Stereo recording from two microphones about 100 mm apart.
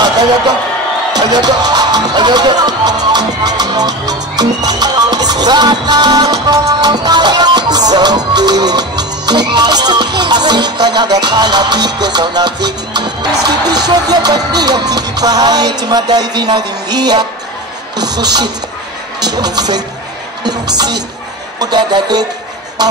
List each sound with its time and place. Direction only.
1.3 s music: 40° right (ahead or behind)
18.0 s a man's voice: 40° right (ahead or behind)
21.5 s a man's voice: 45° right (ahead or behind)
22.8 s a sound: 45° right (ahead or behind)